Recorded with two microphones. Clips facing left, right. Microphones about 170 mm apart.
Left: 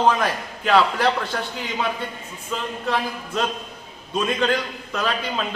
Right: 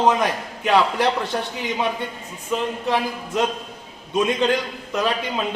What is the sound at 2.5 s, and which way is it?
A man's voice, 15° right (ahead or behind).